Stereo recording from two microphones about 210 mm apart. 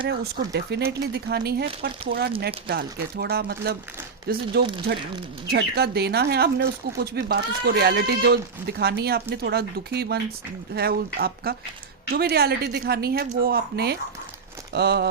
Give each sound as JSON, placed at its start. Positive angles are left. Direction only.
{"t": 0.1, "sound": "speech", "side_deg": -50}
{"t": 5.5, "sound": "speech", "side_deg": -50}